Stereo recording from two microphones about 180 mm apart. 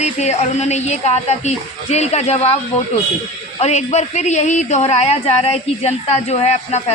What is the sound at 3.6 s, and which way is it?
Speech, 40° left (ahead or behind).